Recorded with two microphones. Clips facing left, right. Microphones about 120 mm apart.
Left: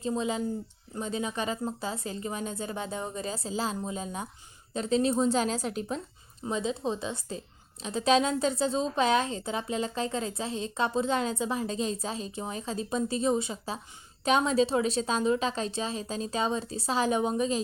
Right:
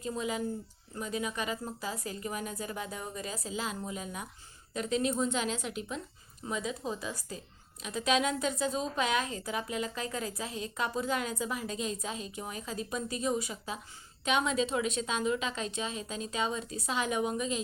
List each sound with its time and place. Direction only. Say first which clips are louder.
0.0 s a woman's voice: left 4 dB; 25° left (ahead or behind)